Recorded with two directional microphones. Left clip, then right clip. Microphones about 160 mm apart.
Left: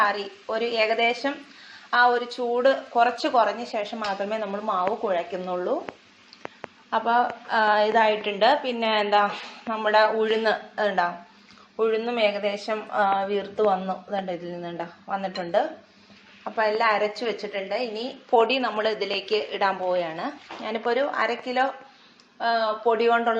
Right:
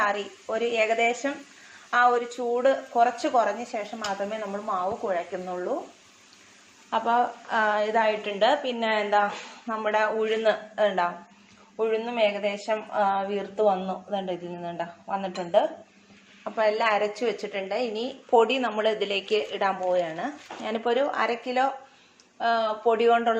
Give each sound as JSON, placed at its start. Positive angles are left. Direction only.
{"t": 0.0, "sound": "a woman's voice", "side_deg": -15}
{"t": 3.9, "sound": "a woman's voice", "side_deg": 5}
{"t": 6.9, "sound": "a woman's voice", "side_deg": -15}
{"t": 16.4, "sound": "a woman's voice", "side_deg": -20}
{"t": 18.3, "sound": "a woman's voice", "side_deg": -15}